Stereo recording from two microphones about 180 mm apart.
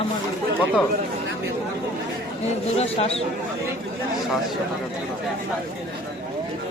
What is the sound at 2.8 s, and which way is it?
Speech, 35° left (ahead or behind).